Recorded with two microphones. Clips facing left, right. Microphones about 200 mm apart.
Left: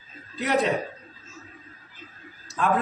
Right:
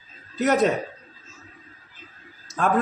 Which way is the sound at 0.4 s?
45° right (ahead or behind).